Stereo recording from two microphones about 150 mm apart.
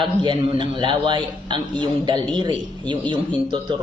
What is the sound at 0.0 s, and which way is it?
A man's voice, 35° right (ahead or behind).